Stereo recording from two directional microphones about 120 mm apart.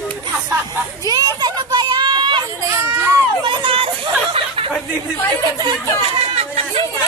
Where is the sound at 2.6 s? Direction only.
25° right (ahead or behind).